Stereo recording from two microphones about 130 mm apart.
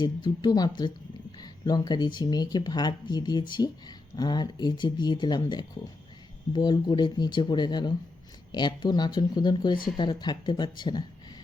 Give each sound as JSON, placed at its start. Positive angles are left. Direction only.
{"t": 0.0, "sound": "speech", "side_deg": 35}